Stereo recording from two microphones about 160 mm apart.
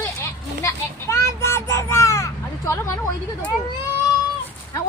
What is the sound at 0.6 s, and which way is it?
Crow, 20° left (ahead or behind).